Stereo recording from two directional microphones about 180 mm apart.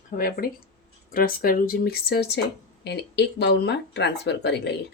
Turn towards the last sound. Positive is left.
turn(degrees=70)  # may be behind; listen again after turning